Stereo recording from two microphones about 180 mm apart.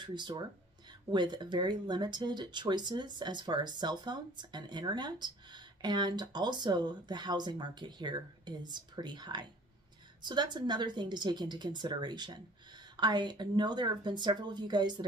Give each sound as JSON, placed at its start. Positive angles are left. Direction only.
{"t": 0.0, "sound": "speech", "side_deg": -25}